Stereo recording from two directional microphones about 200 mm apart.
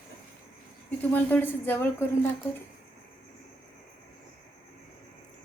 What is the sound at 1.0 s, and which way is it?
Speech, 10° left (ahead or behind).